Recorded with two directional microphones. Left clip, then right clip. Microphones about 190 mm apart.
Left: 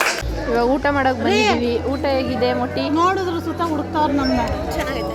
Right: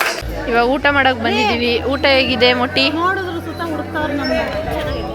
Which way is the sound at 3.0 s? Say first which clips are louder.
Even; 75° left (ahead or behind).